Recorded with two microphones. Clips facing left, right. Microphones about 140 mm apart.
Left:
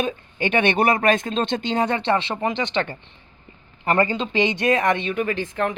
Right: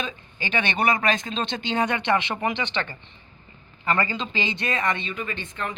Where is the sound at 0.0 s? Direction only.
55° left (ahead or behind).